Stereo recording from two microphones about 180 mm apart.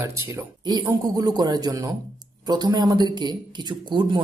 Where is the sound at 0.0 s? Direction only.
15° right (ahead or behind).